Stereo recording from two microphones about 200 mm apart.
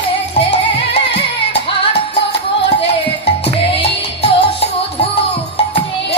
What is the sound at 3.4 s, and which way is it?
Music, 30° left (ahead or behind).